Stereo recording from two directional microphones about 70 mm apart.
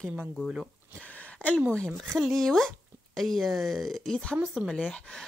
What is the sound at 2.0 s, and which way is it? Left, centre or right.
Speech, centre.